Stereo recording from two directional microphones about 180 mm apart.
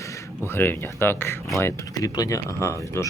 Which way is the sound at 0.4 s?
15° left (ahead or behind).